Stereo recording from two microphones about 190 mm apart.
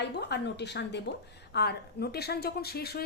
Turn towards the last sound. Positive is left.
turn(degrees=55)  # may be behind; listen again after turning